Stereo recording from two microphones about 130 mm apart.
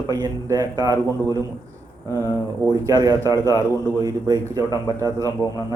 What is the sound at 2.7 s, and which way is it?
Speech, 25° right (ahead or behind).